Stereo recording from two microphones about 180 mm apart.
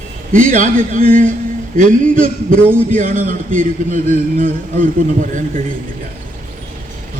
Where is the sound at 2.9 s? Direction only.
50° right (ahead or behind).